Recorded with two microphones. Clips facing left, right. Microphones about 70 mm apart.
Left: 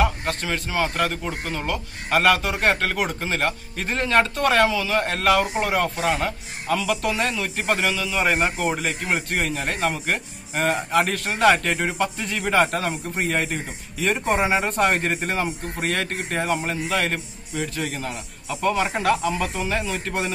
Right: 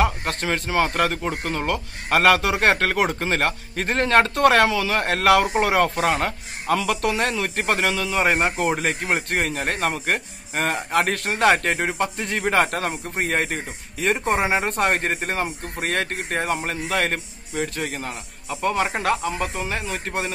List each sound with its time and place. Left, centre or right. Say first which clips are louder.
0.2 s speech: right 1 dB; right
5.9 s speech: right 2 dB; right
8.2 s a man's voice: right 1 dB; right